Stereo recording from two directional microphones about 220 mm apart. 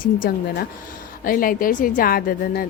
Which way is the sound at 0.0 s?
40° left (ahead or behind).